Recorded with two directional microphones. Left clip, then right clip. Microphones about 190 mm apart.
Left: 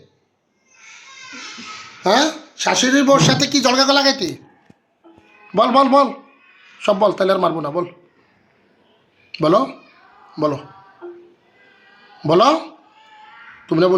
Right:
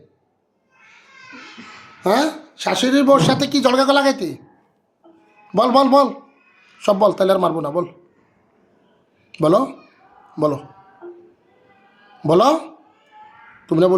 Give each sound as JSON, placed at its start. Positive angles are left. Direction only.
{"t": 2.0, "sound": "speech", "side_deg": 0}
{"t": 5.5, "sound": "speech", "side_deg": -15}
{"t": 9.3, "sound": "speech", "side_deg": -15}
{"t": 12.2, "sound": "a man's voice", "side_deg": -15}